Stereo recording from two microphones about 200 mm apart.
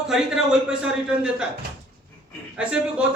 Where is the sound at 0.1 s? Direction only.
5° right (ahead or behind).